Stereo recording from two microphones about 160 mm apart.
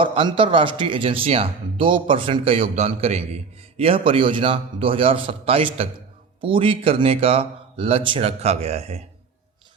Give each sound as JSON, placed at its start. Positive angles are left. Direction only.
{"t": 0.0, "sound": "speech", "side_deg": -35}